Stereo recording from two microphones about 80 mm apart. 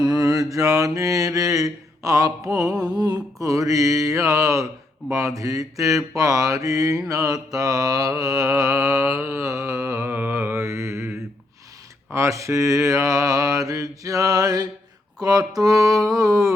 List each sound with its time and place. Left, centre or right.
0.0 s mantra: right
2.8 s mantra: right
8.2 s music: right
12.1 s mantra: right